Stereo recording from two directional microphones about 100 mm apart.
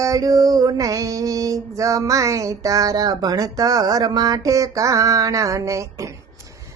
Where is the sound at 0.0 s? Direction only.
35° right (ahead or behind).